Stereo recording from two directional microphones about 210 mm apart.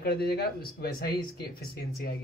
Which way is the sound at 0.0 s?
50° left (ahead or behind).